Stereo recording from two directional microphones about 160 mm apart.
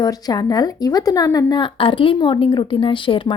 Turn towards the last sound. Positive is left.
turn(degrees=30)  # may be behind; listen again after turning